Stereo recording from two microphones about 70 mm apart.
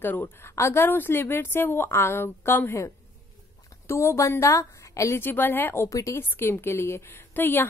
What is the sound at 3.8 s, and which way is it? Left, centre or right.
A woman's voice, left.